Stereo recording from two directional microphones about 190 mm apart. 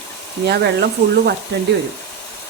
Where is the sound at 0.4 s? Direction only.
60° right (ahead or behind).